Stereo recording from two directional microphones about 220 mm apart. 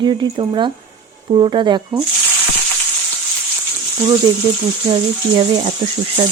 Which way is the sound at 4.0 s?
20° right (ahead or behind).